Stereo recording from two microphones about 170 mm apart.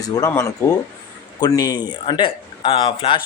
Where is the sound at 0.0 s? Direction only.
20° left (ahead or behind).